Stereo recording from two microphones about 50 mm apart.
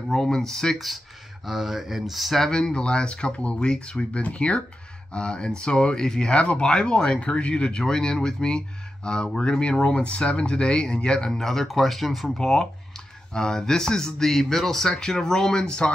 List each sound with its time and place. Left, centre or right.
0.1 s speech: centre
0.7 s speech: centre